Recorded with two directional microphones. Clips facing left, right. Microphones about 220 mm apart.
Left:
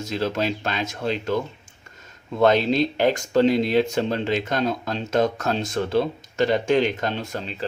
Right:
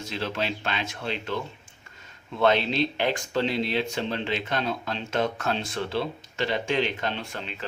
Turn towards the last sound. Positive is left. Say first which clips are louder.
# left 6 dB
turn(degrees=35)  # may be behind; listen again after turning